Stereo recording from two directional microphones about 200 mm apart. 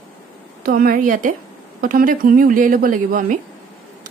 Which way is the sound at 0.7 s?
45° right (ahead or behind).